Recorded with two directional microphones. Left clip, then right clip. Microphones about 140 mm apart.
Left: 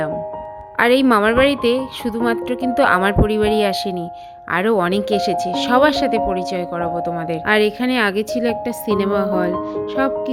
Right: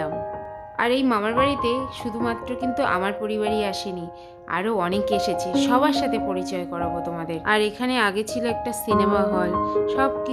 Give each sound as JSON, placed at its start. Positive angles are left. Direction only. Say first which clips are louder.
{"t": 0.8, "sound": "a woman's voice", "louder": "left 8 dB", "side_deg": 45}